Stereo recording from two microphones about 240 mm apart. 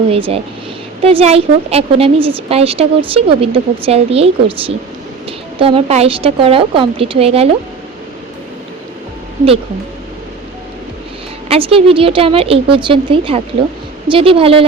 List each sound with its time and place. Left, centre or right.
0.1 s a woman's voice: right
11.4 s a woman's voice: right